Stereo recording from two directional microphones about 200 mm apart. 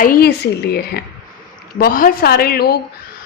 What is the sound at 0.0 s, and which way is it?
A woman's voice, 50° left (ahead or behind).